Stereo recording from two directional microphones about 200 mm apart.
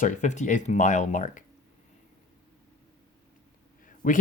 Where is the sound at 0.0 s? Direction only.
40° left (ahead or behind).